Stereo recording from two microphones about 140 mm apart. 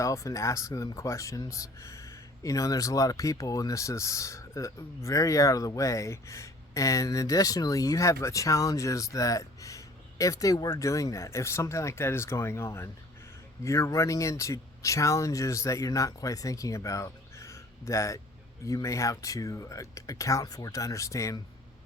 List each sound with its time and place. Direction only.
0.0 s speech: 20° left (ahead or behind)